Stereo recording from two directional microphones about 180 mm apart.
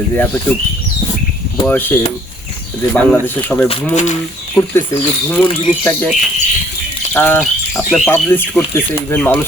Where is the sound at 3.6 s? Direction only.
35° left (ahead or behind).